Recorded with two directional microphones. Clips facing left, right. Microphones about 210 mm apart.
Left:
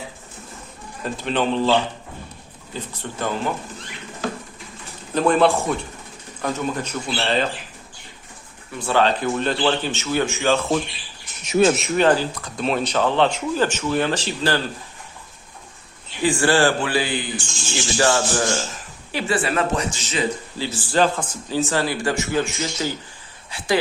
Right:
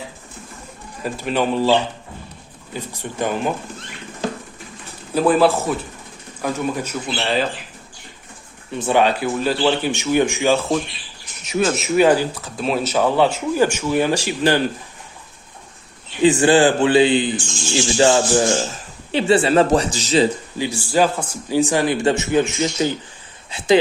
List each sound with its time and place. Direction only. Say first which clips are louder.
1.0 s speech: right 2 dB; 10° right (ahead or behind)
2.7 s speech: right 4 dB; 10° right (ahead or behind)
5.1 s speech: right 2 dB; 5° right (ahead or behind)
8.7 s speech: right 3 dB; 20° right (ahead or behind)
11.8 s speech: right 3 dB; 10° right (ahead or behind)
16.2 s speech: right 5 dB; 20° right (ahead or behind)
20.6 s speech: right 2 dB; 10° right (ahead or behind)